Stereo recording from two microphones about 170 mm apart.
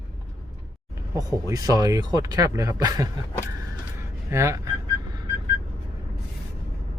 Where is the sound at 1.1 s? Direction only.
20° right (ahead or behind).